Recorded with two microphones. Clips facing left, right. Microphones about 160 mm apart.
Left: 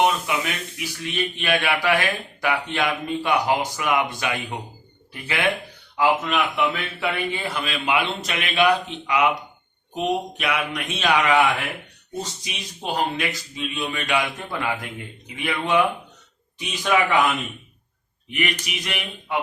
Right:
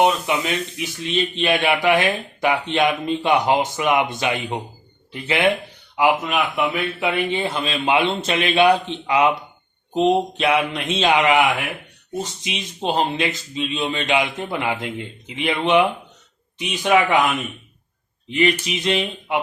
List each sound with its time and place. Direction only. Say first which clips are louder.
0.0 s speech: right 3 dB; 20° right (ahead or behind)
18.3 s a sound: right 8 dB; 25° right (ahead or behind)
18.6 s speech: right 9 dB; 25° right (ahead or behind)